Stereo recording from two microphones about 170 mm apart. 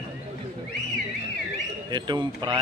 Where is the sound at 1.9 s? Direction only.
25° right (ahead or behind).